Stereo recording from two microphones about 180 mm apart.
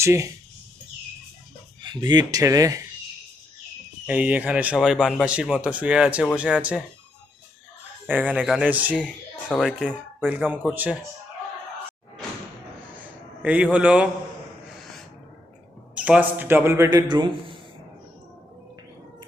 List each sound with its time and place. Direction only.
0.0 s speech: 15° right (ahead or behind)
1.8 s speech: 25° right (ahead or behind)
4.0 s speech: 10° right (ahead or behind)
8.0 s speech: 10° right (ahead or behind)
9.0 s speech: 5° left (ahead or behind)
13.0 s a sound: 10° right (ahead or behind)
16.0 s speech: 5° right (ahead or behind); by 17.6 s 25° right (ahead or behind)